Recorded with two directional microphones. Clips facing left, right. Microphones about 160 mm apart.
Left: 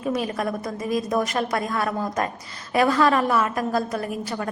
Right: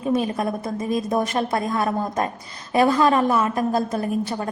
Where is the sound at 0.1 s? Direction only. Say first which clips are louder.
Right 4 dB; 25° right (ahead or behind).